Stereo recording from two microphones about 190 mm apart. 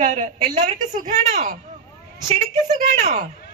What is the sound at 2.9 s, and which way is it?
Speech, 40° right (ahead or behind).